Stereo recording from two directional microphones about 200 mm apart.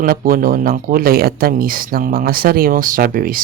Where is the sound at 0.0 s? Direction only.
45° right (ahead or behind).